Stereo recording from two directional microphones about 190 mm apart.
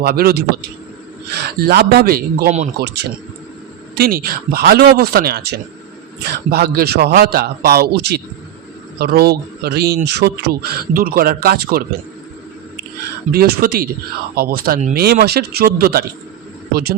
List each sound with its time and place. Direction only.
0.0 s speech: 55° right (ahead or behind)
3.9 s speech: 55° right (ahead or behind)
13.3 s speech: 55° right (ahead or behind)
14.9 s speech: 55° right (ahead or behind)